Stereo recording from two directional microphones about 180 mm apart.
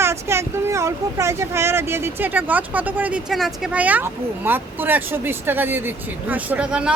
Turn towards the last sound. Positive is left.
turn(degrees=-5)  # may be behind; listen again after turning